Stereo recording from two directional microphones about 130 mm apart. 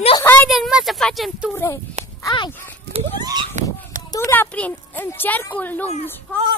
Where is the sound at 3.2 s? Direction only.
30° right (ahead or behind).